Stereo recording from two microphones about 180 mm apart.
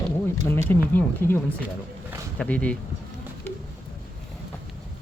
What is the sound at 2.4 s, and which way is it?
Speech, 5° left (ahead or behind).